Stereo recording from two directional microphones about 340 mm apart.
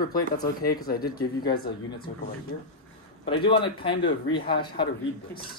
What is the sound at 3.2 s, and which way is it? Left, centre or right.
Speech, centre.